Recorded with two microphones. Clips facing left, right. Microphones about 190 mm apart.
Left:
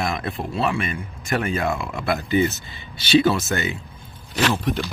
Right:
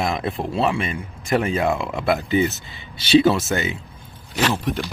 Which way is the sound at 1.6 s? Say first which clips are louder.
Right 3 dB; 10° right (ahead or behind).